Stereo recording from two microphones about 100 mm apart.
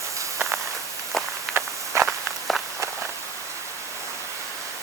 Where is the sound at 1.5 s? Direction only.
25° right (ahead or behind).